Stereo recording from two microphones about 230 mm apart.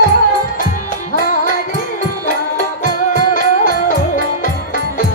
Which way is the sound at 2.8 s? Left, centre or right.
Left.